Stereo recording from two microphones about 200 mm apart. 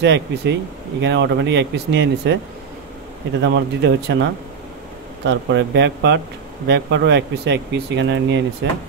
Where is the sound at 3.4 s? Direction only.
65° right (ahead or behind).